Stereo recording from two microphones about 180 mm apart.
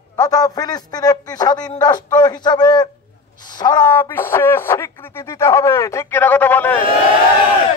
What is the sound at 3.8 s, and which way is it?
Speech, 10° left (ahead or behind).